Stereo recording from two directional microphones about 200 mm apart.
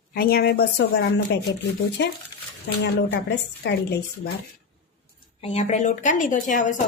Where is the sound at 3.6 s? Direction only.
60° left (ahead or behind).